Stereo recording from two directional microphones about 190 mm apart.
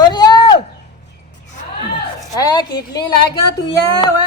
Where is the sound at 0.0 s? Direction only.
20° left (ahead or behind).